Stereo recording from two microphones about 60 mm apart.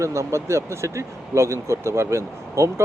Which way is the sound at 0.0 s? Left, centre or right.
Right.